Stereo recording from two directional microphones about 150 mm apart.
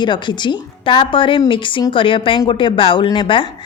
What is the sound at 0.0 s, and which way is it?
A woman's voice, 30° left (ahead or behind).